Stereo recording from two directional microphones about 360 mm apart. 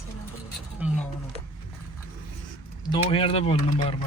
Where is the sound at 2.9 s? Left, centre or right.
Centre.